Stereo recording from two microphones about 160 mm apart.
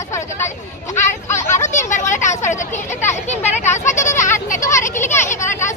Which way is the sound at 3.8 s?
15° left (ahead or behind).